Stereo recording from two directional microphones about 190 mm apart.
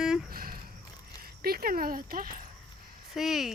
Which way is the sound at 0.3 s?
50° right (ahead or behind).